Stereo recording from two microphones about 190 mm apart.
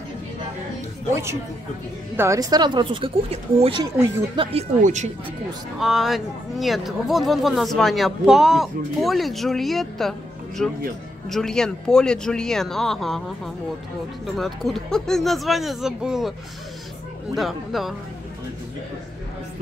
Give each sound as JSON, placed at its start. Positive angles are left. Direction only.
{"t": 2.1, "sound": "speech", "side_deg": -15}
{"t": 4.8, "sound": "speech", "side_deg": -40}
{"t": 5.8, "sound": "speech", "side_deg": 0}
{"t": 14.2, "sound": "speech", "side_deg": 0}
{"t": 17.4, "sound": "speech", "side_deg": 0}